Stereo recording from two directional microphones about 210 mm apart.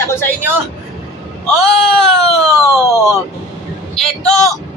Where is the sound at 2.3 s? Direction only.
15° right (ahead or behind).